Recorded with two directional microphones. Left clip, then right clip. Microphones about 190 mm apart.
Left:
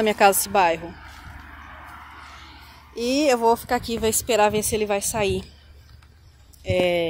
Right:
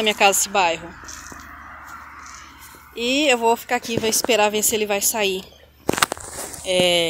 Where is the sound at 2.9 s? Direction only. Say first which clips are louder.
Right 2 dB; 5° left (ahead or behind).